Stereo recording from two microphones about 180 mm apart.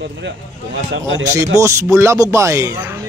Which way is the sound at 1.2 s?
15° right (ahead or behind).